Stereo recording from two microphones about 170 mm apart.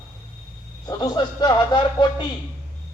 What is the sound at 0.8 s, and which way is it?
Speech, 25° left (ahead or behind).